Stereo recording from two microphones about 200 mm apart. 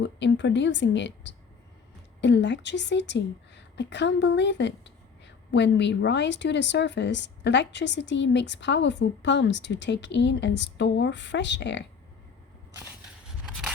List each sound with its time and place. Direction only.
0.0 s a woman's voice: 60° left (ahead or behind)